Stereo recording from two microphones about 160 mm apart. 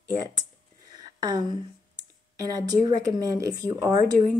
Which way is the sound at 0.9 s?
25° right (ahead or behind).